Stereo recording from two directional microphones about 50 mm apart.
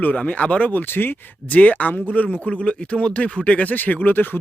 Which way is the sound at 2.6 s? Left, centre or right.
Left.